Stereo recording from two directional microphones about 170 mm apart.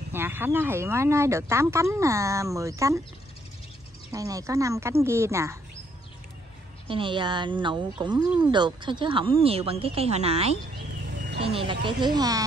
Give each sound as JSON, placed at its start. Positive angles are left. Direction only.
{"t": 0.1, "sound": "speech", "side_deg": -10}
{"t": 4.1, "sound": "speech", "side_deg": -20}
{"t": 6.9, "sound": "speech", "side_deg": -30}